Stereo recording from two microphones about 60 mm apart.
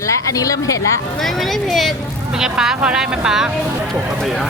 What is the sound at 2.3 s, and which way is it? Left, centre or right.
Speech, centre.